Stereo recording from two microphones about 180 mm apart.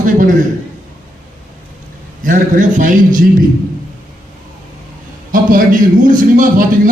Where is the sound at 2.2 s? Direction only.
50° right (ahead or behind).